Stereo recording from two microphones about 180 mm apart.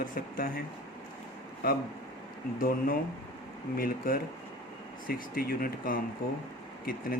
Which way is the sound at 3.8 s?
55° left (ahead or behind).